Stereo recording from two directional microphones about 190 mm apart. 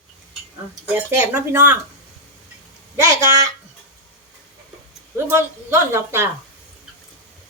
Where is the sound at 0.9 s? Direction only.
10° right (ahead or behind).